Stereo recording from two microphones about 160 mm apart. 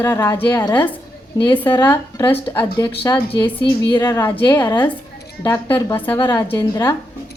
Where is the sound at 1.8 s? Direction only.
10° left (ahead or behind).